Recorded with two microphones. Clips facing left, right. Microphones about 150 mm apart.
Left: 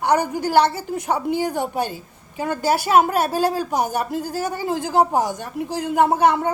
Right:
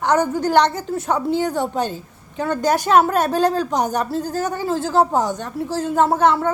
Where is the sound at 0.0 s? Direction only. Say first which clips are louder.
Right 1 dB; 10° left (ahead or behind).